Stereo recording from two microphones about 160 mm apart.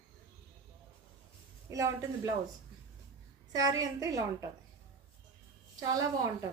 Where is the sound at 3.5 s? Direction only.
25° right (ahead or behind).